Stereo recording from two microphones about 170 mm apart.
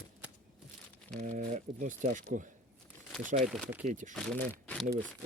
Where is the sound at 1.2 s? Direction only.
45° right (ahead or behind).